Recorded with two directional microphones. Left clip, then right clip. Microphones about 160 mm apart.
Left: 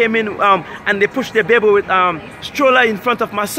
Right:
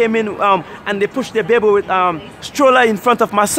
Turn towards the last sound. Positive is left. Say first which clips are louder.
# right 4 dB
turn(degrees=-60)  # may be behind; listen again after turning